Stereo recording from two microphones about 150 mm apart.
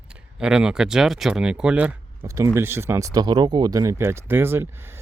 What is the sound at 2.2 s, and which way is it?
Speech, 20° right (ahead or behind).